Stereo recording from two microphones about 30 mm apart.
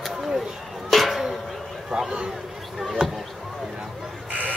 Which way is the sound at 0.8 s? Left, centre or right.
Centre.